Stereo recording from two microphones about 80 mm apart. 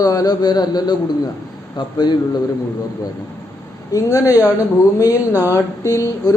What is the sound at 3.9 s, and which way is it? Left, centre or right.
A man's voice, left.